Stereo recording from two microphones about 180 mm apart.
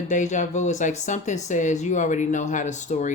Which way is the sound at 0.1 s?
45° left (ahead or behind).